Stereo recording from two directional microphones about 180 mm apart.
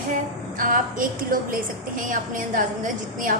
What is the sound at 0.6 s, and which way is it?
A woman's voice, 50° right (ahead or behind).